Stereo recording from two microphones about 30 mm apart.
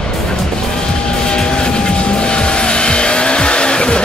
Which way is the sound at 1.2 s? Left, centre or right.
Left.